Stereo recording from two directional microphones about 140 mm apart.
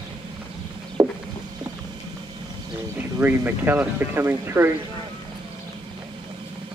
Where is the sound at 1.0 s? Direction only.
10° right (ahead or behind).